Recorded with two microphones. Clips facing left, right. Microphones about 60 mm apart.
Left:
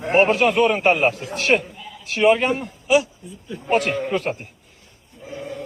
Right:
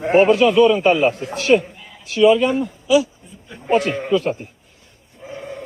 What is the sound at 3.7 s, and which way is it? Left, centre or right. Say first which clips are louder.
Speech: right 3 dB; left.